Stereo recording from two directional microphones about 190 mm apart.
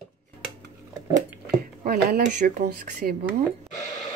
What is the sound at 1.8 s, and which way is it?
Speech, 50° right (ahead or behind).